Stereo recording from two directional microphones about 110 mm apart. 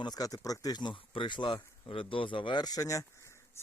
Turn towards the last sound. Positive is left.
turn(degrees=30)  # may be behind; listen again after turning